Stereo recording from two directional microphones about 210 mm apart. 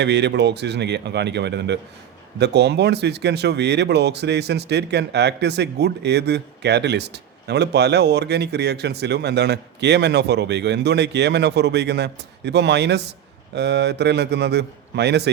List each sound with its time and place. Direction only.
0.0 s speech: 55° right (ahead or behind)